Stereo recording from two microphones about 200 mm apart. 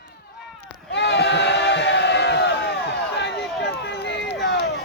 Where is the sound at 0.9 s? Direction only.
60° left (ahead or behind).